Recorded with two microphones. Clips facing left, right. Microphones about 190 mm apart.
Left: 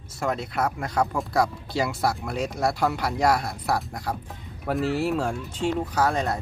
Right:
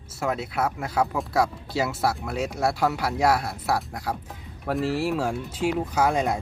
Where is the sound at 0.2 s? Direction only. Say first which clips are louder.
Even; 5° right (ahead or behind).